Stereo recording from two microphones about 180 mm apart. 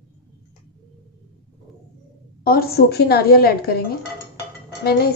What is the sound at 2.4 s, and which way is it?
A woman's voice, 60° left (ahead or behind).